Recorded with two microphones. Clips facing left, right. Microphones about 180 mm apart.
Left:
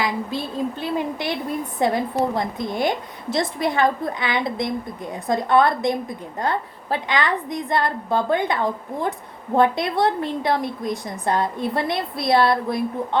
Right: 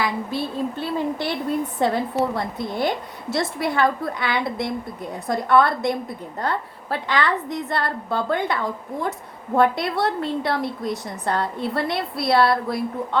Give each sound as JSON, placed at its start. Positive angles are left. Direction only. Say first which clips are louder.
{"t": 0.8, "sound": "a woman's voice", "louder": "even", "side_deg": 15}